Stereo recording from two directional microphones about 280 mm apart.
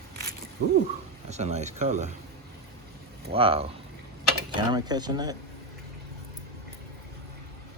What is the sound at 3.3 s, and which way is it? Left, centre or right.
Speech, centre.